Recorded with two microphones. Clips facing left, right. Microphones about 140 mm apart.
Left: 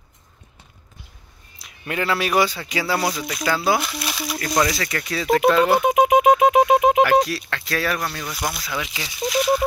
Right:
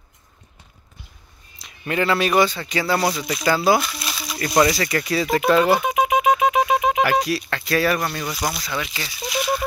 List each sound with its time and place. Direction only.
1.6 s speech: 5° left (ahead or behind)
4.4 s speech: 5° right (ahead or behind)
5.9 s a sound: 50° left (ahead or behind)
7.0 s speech: 5° right (ahead or behind)